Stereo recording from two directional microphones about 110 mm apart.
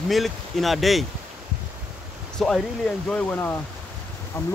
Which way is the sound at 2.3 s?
5° left (ahead or behind).